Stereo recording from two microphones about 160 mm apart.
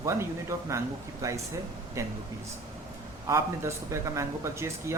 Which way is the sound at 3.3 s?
20° right (ahead or behind).